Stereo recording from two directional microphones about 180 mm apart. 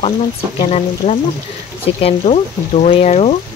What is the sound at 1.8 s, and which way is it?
Speech, 35° left (ahead or behind).